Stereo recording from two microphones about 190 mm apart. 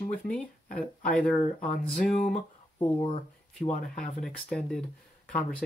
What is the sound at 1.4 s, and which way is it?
Speech, 50° left (ahead or behind).